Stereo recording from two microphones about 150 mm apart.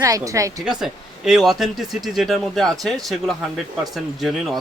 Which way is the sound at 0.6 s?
Centre (ahead or behind).